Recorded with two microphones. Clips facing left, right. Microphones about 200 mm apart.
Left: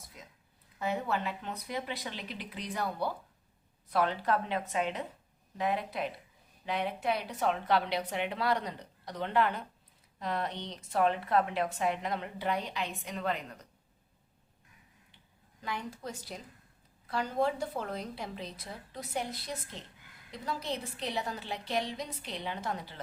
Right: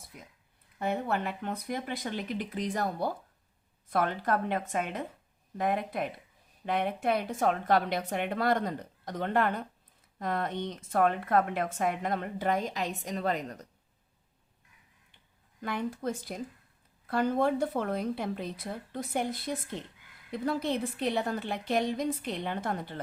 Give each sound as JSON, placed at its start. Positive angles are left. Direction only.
{"t": 0.8, "sound": "a woman's voice", "side_deg": -55}
{"t": 15.6, "sound": "a woman's voice", "side_deg": -55}